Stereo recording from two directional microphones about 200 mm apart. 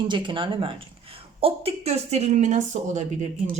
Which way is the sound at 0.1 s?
25° right (ahead or behind).